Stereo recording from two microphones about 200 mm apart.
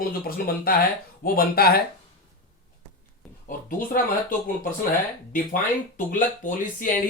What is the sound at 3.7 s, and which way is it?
Speech, 45° left (ahead or behind).